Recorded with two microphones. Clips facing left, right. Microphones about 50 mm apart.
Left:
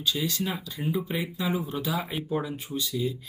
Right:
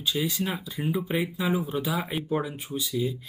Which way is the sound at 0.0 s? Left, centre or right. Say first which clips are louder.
Right 1 dB; centre.